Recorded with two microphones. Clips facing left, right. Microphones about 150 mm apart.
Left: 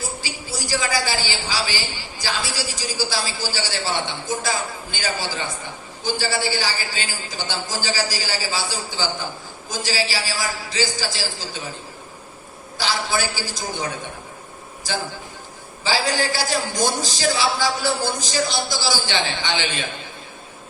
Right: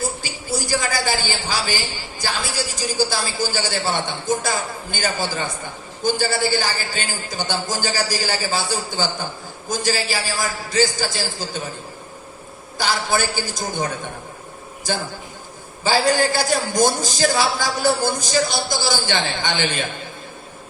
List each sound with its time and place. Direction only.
0.2 s a woman's voice: 50° right (ahead or behind)
12.7 s a man's voice: 50° right (ahead or behind)
15.8 s a man's voice: 50° right (ahead or behind)